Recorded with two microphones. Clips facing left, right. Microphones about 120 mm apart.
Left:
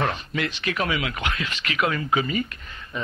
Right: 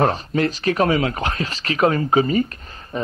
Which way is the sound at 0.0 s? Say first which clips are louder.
Right 7 dB; 40° right (ahead or behind).